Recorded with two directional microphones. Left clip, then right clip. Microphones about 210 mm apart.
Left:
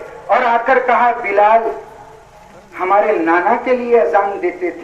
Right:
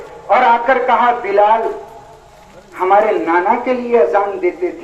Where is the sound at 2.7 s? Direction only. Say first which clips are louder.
Right 1 dB; 50° left (ahead or behind).